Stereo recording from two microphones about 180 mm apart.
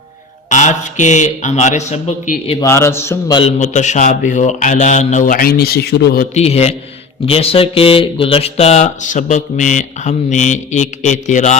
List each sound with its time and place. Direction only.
0.5 s speech: 45° left (ahead or behind)
2.6 s speech: 15° left (ahead or behind)
3.6 s a man's voice: 40° left (ahead or behind); by 6.2 s 65° left (ahead or behind)
6.3 s speech: 35° left (ahead or behind)